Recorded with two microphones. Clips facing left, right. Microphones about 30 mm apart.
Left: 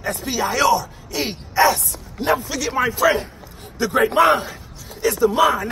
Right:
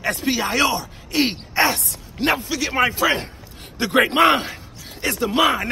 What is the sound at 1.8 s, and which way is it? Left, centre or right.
Speech, right.